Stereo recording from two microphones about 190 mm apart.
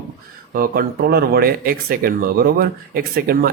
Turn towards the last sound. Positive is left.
turn(degrees=-50)  # may be behind; listen again after turning